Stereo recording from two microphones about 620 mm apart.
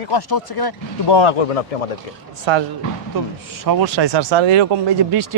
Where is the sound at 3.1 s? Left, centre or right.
Right.